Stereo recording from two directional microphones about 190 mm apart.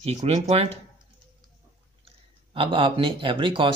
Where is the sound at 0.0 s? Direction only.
35° right (ahead or behind).